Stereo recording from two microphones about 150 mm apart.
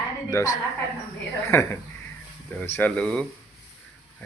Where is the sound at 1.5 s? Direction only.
15° left (ahead or behind).